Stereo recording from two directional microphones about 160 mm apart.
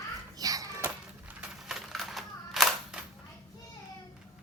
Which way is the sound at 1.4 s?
Centre (ahead or behind).